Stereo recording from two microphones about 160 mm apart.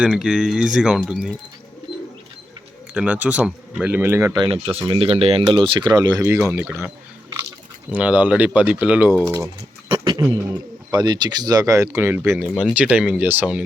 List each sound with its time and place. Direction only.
0.0 s speech: 5° right (ahead or behind)
2.9 s speech: 5° right (ahead or behind)
4.8 s speech: 35° right (ahead or behind); by 9.1 s 10° right (ahead or behind)
9.9 s a sound: 30° right (ahead or behind)
10.9 s speech: 25° right (ahead or behind); by 13.7 s 10° right (ahead or behind)